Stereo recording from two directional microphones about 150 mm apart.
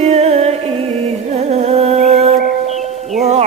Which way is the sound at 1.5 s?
45° right (ahead or behind).